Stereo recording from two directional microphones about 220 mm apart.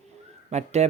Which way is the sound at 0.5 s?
30° right (ahead or behind).